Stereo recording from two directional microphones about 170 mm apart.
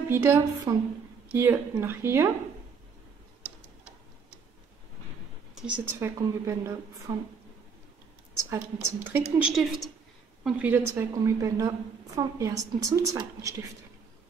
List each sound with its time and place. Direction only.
0.1 s a woman's voice: 15° right (ahead or behind)
5.5 s a woman's voice: 5° right (ahead or behind)
7.1 s a woman's voice: 25° right (ahead or behind)
8.5 s a woman's voice: 10° right (ahead or behind)
9.4 s a woman's voice: centre (ahead or behind); by 13.7 s 20° right (ahead or behind)